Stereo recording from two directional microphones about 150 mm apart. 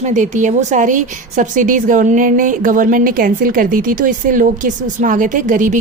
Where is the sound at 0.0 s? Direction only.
50° right (ahead or behind).